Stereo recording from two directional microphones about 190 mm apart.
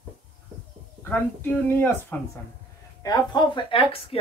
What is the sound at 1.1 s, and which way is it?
A woman's voice, 10° left (ahead or behind).